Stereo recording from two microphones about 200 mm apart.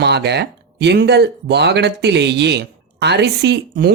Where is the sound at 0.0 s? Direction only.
55° right (ahead or behind).